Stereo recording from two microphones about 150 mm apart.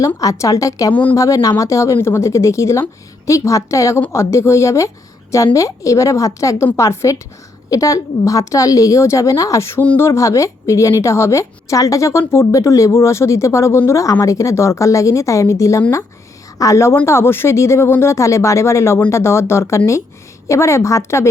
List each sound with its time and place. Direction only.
0.2 s a woman's voice: 20° left (ahead or behind)